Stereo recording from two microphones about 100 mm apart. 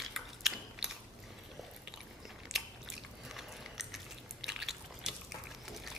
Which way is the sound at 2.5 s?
Centre (ahead or behind).